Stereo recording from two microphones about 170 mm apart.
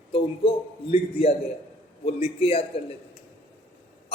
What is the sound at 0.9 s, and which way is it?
A man's voice, 35° left (ahead or behind).